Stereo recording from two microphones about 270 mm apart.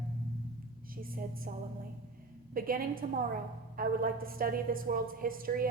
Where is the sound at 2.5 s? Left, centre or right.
Right.